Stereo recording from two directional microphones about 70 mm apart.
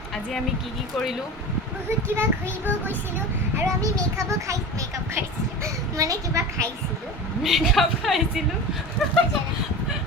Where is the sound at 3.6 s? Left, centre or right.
Right.